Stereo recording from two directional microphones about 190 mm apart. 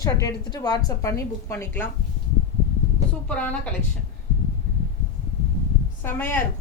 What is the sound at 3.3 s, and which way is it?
Speech, 5° left (ahead or behind).